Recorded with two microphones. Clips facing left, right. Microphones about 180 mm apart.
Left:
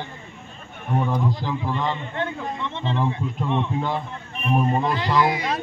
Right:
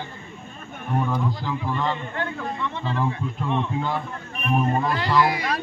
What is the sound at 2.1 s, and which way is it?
A man's voice, 25° left (ahead or behind).